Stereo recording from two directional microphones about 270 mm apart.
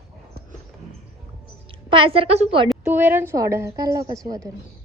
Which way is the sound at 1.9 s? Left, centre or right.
Centre.